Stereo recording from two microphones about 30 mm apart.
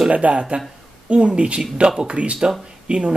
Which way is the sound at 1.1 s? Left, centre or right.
Right.